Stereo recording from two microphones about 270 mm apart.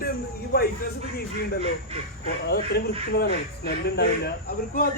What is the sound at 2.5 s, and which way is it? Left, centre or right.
Speech, left.